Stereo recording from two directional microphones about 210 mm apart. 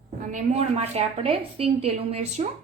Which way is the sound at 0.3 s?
35° right (ahead or behind).